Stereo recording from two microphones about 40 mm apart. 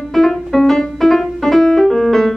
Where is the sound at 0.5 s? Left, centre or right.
Centre.